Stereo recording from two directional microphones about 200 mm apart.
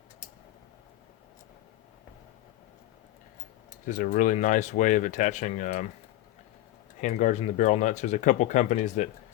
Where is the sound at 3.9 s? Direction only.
40° left (ahead or behind).